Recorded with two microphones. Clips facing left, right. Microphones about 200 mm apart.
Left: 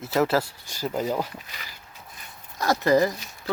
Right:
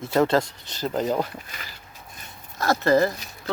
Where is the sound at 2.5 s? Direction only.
15° left (ahead or behind).